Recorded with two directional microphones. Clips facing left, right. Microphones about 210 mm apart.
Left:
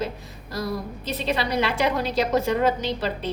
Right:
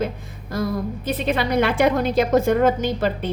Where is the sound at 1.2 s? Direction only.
50° right (ahead or behind).